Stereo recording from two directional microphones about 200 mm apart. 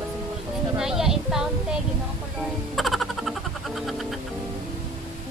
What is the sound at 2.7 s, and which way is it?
Music, centre (ahead or behind).